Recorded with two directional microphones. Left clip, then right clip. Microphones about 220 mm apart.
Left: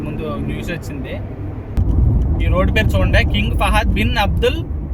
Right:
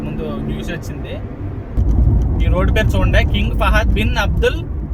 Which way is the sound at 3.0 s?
15° left (ahead or behind).